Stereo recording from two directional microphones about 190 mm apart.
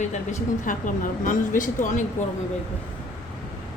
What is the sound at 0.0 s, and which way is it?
Speech, 40° left (ahead or behind).